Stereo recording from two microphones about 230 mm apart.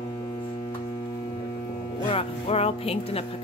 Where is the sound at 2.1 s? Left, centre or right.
Left.